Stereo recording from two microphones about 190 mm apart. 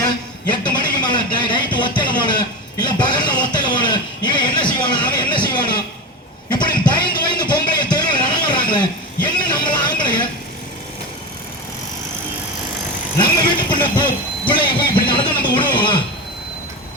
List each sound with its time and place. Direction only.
0.6 s speech: 25° left (ahead or behind)
6.5 s a sound: 20° left (ahead or behind)
13.7 s vehicle: 25° left (ahead or behind)